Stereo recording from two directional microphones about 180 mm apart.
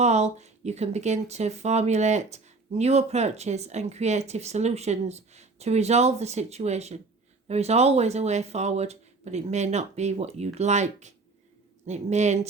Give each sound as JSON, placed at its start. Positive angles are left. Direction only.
{"t": 0.0, "sound": "speech", "side_deg": -40}